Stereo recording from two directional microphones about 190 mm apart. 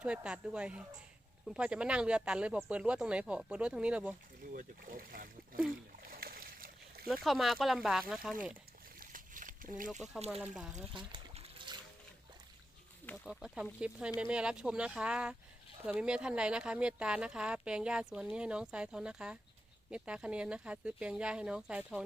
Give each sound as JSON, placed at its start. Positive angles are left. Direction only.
{"t": 0.0, "sound": "speech", "side_deg": -5}
{"t": 4.5, "sound": "speech", "side_deg": -45}
{"t": 6.0, "sound": "splash", "side_deg": -50}
{"t": 7.1, "sound": "speech", "side_deg": 0}
{"t": 9.0, "sound": "a sound", "side_deg": -45}
{"t": 10.4, "sound": "speech", "side_deg": -5}
{"t": 11.1, "sound": "trickle", "side_deg": -30}
{"t": 13.2, "sound": "speech", "side_deg": 0}